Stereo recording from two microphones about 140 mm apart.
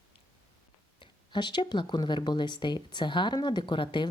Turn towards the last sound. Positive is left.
turn(degrees=35)  # may be behind; listen again after turning